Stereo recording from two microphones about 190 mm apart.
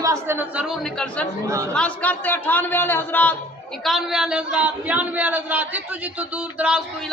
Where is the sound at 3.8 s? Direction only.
Centre (ahead or behind).